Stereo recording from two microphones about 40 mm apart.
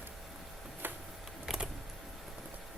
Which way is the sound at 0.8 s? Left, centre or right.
Right.